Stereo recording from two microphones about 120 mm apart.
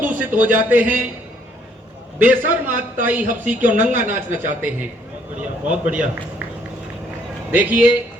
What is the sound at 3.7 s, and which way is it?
Speech, 90° right.